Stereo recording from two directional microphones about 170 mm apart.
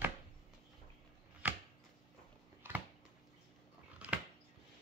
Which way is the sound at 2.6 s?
10° right (ahead or behind).